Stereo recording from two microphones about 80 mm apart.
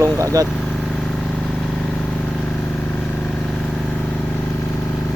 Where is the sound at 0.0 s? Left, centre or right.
Right.